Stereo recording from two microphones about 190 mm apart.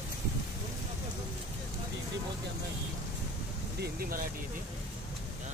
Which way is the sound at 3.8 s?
50° right (ahead or behind).